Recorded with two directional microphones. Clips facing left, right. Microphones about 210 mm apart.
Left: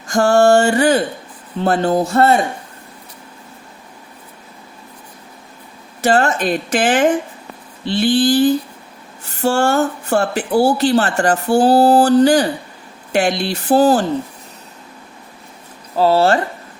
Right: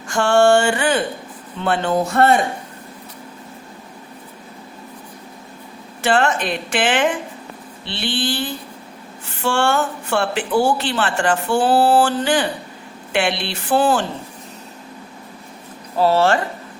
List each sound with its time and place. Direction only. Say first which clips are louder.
0.1 s speech: left 2 dB; 40° left (ahead or behind)
6.0 s speech: left 3 dB; 40° left (ahead or behind)
16.0 s speech: left 2 dB; 35° left (ahead or behind)